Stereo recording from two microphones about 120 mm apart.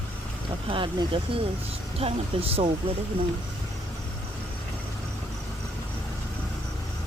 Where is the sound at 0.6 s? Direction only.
45° right (ahead or behind).